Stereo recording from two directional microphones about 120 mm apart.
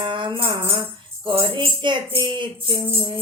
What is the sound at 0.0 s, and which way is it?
Music, 45° right (ahead or behind).